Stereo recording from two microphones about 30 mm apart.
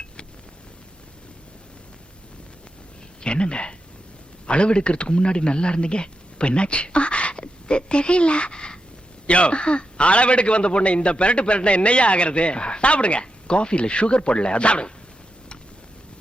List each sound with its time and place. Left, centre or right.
3.2 s a man's voice: left
9.2 s a man's voice: left